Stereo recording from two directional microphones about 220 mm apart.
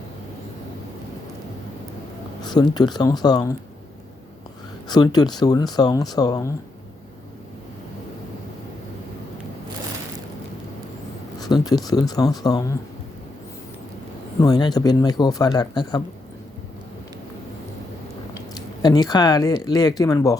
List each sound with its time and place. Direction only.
2.5 s speech: 20° left (ahead or behind)
4.9 s speech: 20° left (ahead or behind)
11.3 s speech: 20° left (ahead or behind)
14.4 s speech: 15° left (ahead or behind)
18.3 s speech: 20° left (ahead or behind)